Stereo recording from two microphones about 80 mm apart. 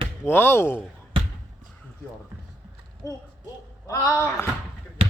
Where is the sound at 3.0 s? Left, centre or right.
Left.